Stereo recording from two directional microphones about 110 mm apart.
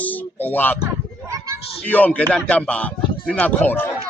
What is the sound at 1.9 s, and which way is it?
Speech, 15° left (ahead or behind).